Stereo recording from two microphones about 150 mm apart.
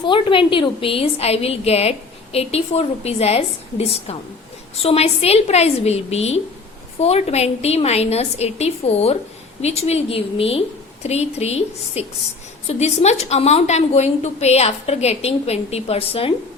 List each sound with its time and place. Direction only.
0.0 s a woman's voice: 35° left (ahead or behind)